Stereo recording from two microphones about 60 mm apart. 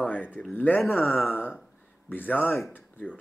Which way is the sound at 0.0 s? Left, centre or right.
Left.